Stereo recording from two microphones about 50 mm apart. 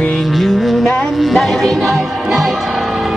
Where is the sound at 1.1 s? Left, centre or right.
Centre.